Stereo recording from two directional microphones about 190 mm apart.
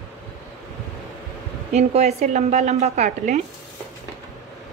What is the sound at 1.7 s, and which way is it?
A woman's voice, 35° right (ahead or behind).